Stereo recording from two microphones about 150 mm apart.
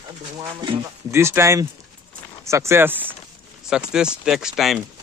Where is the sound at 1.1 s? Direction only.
15° right (ahead or behind).